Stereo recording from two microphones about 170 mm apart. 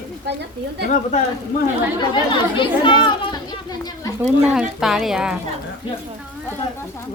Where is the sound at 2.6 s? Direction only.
30° left (ahead or behind).